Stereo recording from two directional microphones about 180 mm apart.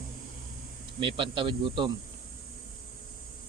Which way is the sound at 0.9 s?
30° right (ahead or behind).